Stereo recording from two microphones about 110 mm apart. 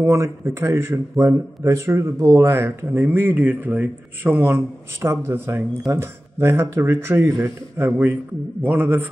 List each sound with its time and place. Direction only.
0.0 s a man's voice: 25° right (ahead or behind)